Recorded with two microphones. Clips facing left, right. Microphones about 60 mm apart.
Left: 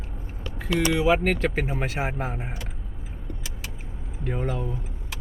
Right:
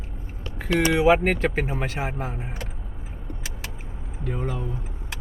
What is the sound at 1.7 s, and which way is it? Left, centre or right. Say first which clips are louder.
Speech: even; centre.